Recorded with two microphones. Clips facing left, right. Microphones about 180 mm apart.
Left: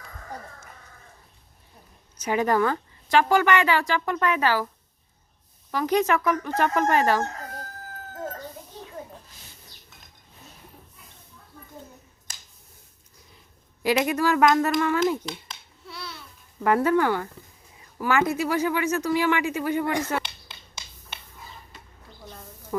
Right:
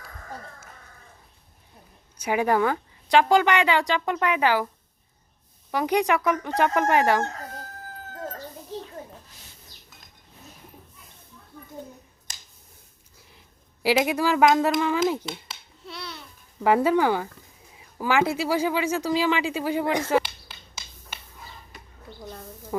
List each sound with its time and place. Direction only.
2.1 s speech: 10° right (ahead or behind)
5.7 s speech: 15° right (ahead or behind)
14.0 s speech: 15° right (ahead or behind)
15.9 s babbling: 20° right (ahead or behind)
16.6 s speech: 15° right (ahead or behind)
22.7 s speech: 20° right (ahead or behind)